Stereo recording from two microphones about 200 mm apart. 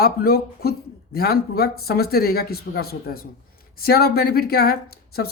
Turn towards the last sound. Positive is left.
turn(degrees=50)  # may be behind; listen again after turning